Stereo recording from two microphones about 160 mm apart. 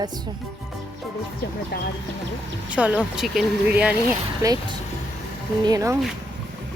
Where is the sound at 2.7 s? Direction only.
10° right (ahead or behind).